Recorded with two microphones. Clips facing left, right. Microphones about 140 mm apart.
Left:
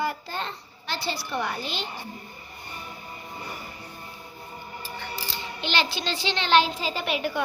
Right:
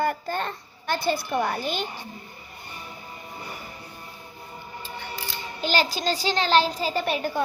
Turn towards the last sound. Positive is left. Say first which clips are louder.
# right 2 dB
turn(degrees=-40)  # may be behind; listen again after turning